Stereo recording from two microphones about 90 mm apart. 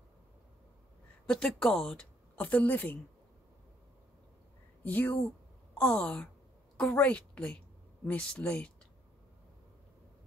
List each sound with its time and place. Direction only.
1.2 s speech: 10° left (ahead or behind)
2.3 s a woman's voice: 20° left (ahead or behind)
4.8 s a woman's voice: 20° left (ahead or behind)